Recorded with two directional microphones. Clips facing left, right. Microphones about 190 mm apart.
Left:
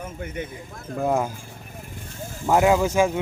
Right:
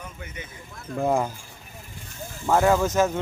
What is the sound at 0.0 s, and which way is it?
Speech, 50° left (ahead or behind).